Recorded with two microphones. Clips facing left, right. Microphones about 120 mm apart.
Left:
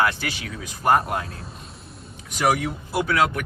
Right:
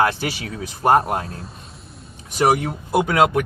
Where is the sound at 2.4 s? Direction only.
45° right (ahead or behind).